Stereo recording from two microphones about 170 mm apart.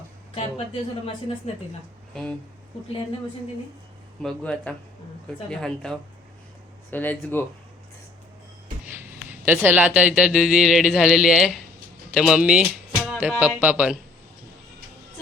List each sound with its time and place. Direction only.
0.3 s a woman's voice: 35° left (ahead or behind)
4.2 s speech: 5° left (ahead or behind)
9.5 s speech: 10° right (ahead or behind)